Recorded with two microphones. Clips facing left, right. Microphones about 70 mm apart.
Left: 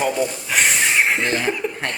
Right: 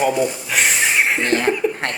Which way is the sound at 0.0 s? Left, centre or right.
Centre.